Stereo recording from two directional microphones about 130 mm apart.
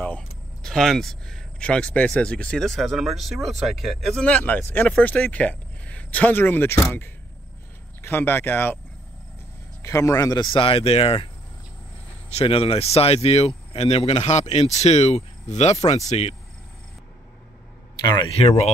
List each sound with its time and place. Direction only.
0.0 s speech: 10° left (ahead or behind)
9.8 s speech: 25° left (ahead or behind); by 11.2 s 50° left (ahead or behind)
12.3 s speech: 45° left (ahead or behind)
17.9 s speech: 30° left (ahead or behind)
18.3 s speech: 55° left (ahead or behind)